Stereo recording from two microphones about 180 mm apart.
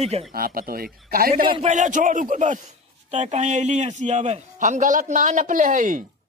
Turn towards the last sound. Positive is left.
turn(degrees=-45)  # may be behind; listen again after turning